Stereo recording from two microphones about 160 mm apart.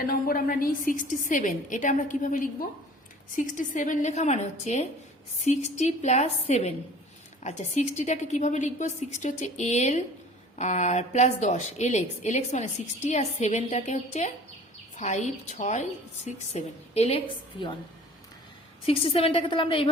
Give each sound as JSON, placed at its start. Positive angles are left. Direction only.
{"t": 0.0, "sound": "a woman's voice", "side_deg": 65}
{"t": 18.9, "sound": "a woman's voice", "side_deg": 35}